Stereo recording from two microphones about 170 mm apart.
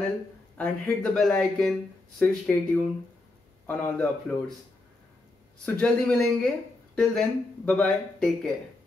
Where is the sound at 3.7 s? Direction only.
5° left (ahead or behind).